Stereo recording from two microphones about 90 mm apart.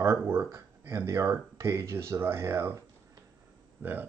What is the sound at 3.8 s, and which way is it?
Speech, 20° right (ahead or behind).